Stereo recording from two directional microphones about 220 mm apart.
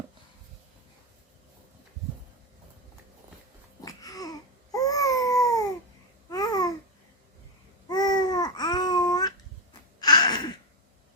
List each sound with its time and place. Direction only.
3.8 s babbling: 15° left (ahead or behind)
7.9 s babbling: 20° left (ahead or behind)
10.0 s a sound: 20° left (ahead or behind)